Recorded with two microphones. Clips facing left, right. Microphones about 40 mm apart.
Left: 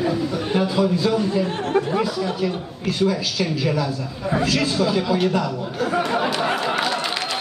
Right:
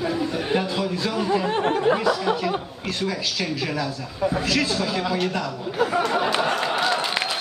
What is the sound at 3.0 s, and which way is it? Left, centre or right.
A man's voice, centre.